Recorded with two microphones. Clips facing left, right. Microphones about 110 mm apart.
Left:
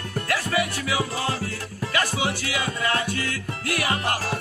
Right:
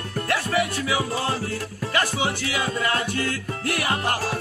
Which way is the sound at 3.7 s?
20° right (ahead or behind).